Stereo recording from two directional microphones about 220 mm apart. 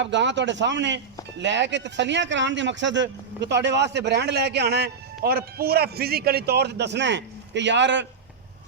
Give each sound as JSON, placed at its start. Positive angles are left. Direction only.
{"t": 0.0, "sound": "speech", "side_deg": -55}